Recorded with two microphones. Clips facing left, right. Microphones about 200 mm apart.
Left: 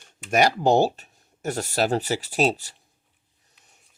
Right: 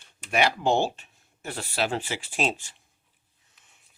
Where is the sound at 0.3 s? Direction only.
40° left (ahead or behind).